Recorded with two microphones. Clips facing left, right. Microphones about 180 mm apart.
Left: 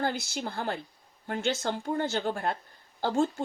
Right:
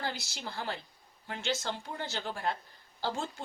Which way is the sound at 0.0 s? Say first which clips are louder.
Left 7 dB; 50° left (ahead or behind).